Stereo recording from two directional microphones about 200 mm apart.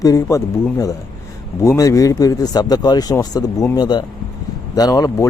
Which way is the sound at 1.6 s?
15° left (ahead or behind).